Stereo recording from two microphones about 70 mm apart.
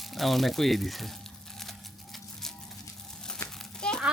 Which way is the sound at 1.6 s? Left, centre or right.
Centre.